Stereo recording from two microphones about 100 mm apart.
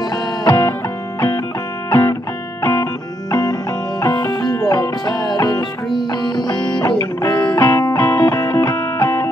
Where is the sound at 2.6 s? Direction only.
30° left (ahead or behind).